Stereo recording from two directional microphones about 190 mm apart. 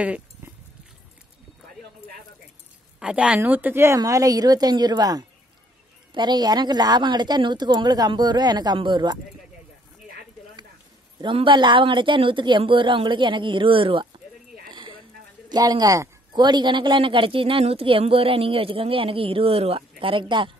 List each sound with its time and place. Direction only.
0.0 s goat: 10° right (ahead or behind)
3.0 s a woman's voice: 5° right (ahead or behind); by 9.2 s 25° right (ahead or behind)
11.1 s speech: 25° right (ahead or behind)
14.7 s a sound: 25° right (ahead or behind)
15.5 s speech: 20° right (ahead or behind)